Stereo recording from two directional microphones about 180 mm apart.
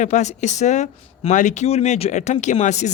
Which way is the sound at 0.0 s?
40° left (ahead or behind).